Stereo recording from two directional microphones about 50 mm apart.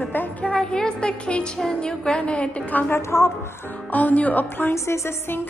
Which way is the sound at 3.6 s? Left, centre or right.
Left.